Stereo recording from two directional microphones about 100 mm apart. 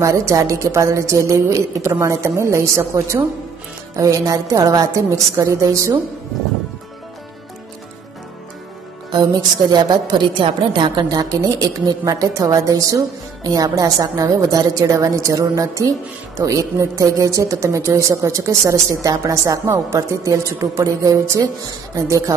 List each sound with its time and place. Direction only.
0.3 s a woman's voice: 30° right (ahead or behind)
9.7 s a woman's voice: 45° right (ahead or behind)